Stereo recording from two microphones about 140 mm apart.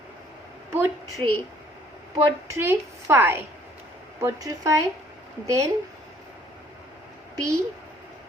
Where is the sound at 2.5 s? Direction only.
15° right (ahead or behind).